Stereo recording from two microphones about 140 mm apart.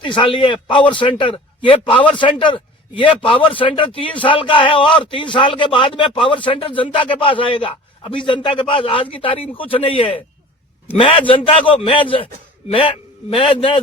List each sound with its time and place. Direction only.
0.0 s a man's voice: 35° left (ahead or behind)